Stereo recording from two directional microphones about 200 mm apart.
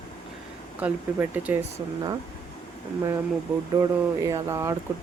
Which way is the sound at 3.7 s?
20° right (ahead or behind).